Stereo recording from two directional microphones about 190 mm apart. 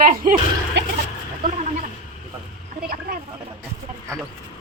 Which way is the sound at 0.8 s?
65° right (ahead or behind).